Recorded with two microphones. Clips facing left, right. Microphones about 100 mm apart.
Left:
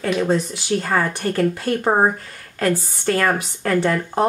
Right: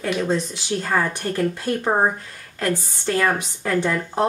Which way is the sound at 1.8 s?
15° left (ahead or behind).